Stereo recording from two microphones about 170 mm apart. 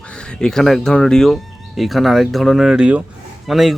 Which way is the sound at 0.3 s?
5° left (ahead or behind).